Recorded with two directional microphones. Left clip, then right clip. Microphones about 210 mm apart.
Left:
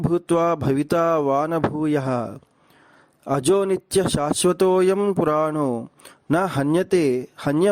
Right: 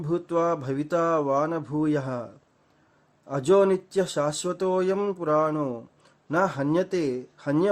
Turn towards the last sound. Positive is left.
turn(degrees=40)  # may be behind; listen again after turning